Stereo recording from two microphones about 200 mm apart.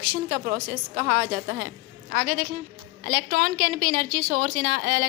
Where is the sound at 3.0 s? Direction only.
55° right (ahead or behind).